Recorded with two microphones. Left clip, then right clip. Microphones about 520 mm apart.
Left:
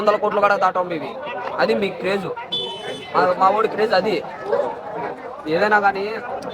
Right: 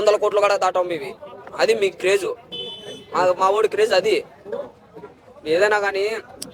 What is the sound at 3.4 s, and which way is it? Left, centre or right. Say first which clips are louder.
Speech: left 1 dB; right.